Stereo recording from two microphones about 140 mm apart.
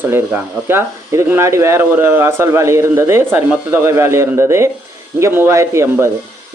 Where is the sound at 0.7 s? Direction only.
15° right (ahead or behind).